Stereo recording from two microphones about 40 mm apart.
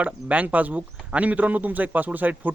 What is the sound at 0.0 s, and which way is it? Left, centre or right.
Speech, right.